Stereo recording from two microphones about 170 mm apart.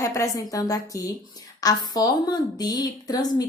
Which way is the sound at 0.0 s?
20° left (ahead or behind).